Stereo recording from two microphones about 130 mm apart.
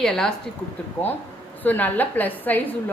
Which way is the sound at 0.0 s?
5° left (ahead or behind).